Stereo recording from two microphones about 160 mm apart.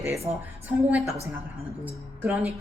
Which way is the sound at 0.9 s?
10° right (ahead or behind).